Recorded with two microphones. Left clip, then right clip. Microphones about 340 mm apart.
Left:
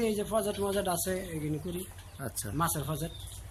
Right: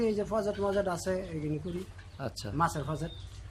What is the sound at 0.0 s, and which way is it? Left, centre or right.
Speech, centre.